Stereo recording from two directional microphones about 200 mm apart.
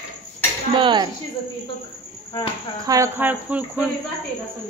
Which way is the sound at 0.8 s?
20° right (ahead or behind).